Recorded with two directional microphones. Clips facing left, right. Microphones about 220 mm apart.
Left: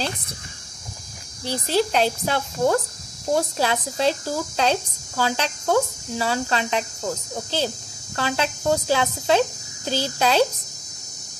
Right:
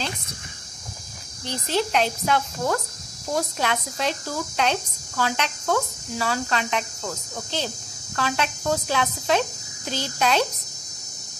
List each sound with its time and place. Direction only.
1.4 s speech: 35° left (ahead or behind)